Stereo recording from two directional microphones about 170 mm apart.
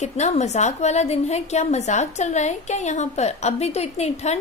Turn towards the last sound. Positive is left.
turn(degrees=40)  # may be behind; listen again after turning